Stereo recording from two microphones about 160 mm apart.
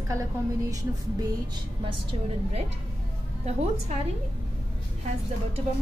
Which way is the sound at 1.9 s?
35° right (ahead or behind).